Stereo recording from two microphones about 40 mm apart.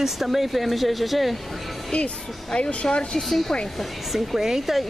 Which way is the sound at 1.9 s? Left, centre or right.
Left.